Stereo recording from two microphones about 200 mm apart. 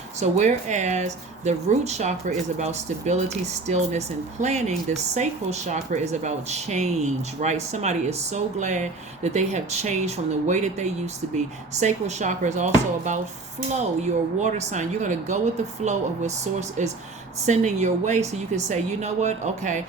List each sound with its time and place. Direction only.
0.2 s speech: 35° right (ahead or behind)
14.3 s speech: 35° right (ahead or behind)